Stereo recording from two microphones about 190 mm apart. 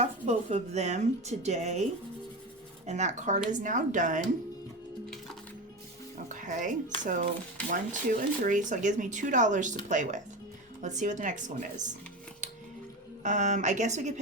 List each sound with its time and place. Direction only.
0.0 s speech: 35° right (ahead or behind)
6.2 s music: 40° right (ahead or behind)
7.0 s speech: 40° right (ahead or behind)
13.2 s speech: 40° right (ahead or behind)